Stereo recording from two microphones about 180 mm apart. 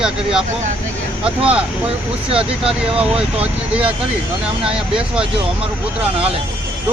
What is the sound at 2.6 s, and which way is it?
Speech, 5° right (ahead or behind).